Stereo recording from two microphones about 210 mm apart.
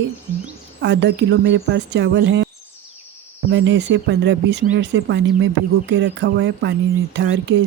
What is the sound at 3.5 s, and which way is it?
Speech, 60° right (ahead or behind).